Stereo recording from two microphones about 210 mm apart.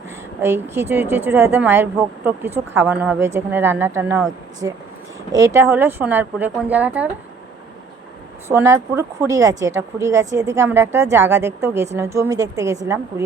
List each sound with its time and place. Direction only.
0.4 s a woman's voice: 10° right (ahead or behind)
8.4 s a woman's voice: 15° right (ahead or behind)